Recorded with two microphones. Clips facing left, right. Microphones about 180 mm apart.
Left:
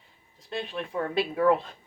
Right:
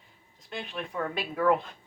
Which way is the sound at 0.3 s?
30° left (ahead or behind).